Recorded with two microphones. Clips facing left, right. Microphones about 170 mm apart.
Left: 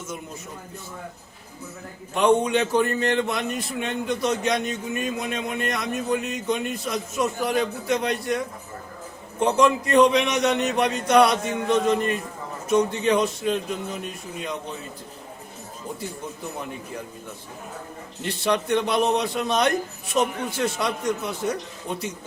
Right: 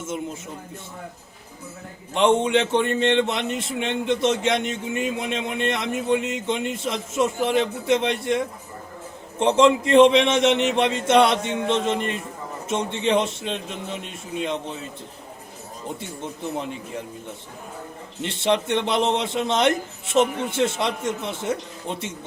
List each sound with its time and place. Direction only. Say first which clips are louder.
2.1 s a man's voice: right 1 dB; 25° right (ahead or behind)
18.2 s a man's voice: right 2 dB; 25° right (ahead or behind)